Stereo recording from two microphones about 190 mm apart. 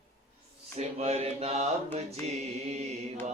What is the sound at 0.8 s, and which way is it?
Mantra, 35° right (ahead or behind).